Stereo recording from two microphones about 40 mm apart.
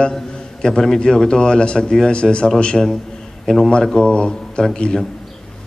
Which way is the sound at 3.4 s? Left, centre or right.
Centre.